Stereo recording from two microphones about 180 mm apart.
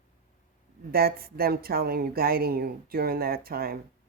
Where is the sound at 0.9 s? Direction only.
60° right (ahead or behind).